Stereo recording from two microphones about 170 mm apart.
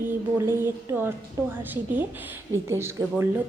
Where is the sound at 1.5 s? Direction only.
10° right (ahead or behind).